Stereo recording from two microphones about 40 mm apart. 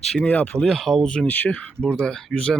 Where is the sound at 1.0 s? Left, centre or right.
Left.